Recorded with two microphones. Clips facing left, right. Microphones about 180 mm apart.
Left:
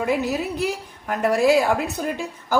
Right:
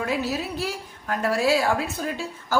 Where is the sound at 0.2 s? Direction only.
15° left (ahead or behind).